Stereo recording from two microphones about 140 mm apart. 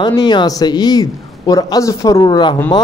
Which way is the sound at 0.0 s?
30° left (ahead or behind).